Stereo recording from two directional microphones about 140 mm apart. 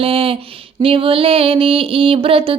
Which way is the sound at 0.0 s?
40° right (ahead or behind).